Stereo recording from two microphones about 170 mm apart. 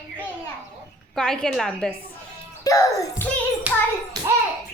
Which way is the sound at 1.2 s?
5° left (ahead or behind).